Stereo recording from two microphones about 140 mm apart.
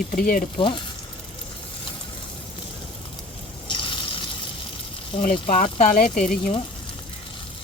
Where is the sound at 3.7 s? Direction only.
35° left (ahead or behind).